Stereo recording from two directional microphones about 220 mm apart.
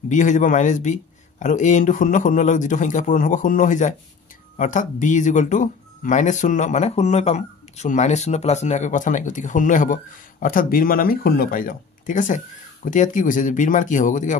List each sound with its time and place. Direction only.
0.1 s speech: 35° left (ahead or behind)